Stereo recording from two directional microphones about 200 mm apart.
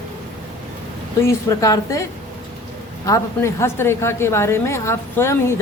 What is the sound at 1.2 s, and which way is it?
A woman's voice, 15° left (ahead or behind).